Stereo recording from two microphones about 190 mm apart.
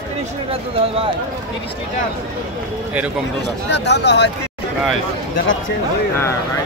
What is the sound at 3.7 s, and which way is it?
Speech, 65° left (ahead or behind).